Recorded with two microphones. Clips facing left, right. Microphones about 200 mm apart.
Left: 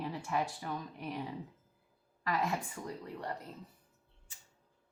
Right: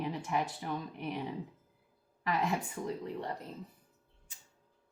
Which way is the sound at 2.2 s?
20° right (ahead or behind).